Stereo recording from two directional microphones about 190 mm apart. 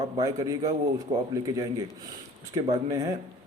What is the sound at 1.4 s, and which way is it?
Speech, 20° right (ahead or behind).